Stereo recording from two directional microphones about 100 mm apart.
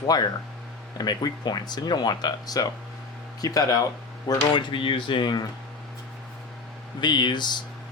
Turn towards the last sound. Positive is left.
turn(degrees=45)  # may be behind; listen again after turning